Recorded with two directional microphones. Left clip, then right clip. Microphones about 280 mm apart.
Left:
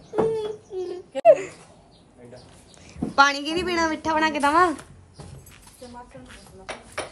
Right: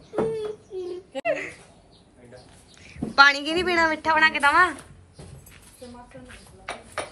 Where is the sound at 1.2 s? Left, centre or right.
Centre.